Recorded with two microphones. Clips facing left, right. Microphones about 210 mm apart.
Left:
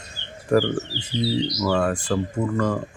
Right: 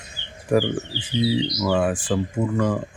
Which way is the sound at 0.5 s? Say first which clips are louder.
Left 1 dB; 10° right (ahead or behind).